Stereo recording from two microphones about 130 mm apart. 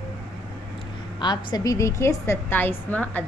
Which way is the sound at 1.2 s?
30° left (ahead or behind).